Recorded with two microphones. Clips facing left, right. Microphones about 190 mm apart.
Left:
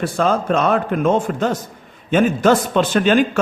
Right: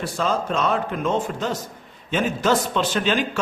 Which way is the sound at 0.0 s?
55° left (ahead or behind).